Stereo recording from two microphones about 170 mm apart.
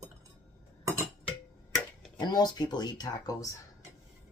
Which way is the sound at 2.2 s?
25° left (ahead or behind).